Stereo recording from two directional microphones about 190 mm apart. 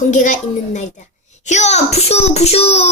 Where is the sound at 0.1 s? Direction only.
40° left (ahead or behind).